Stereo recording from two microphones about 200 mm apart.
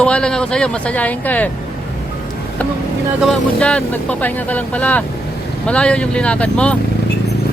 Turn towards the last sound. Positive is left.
turn(degrees=5)  # may be behind; listen again after turning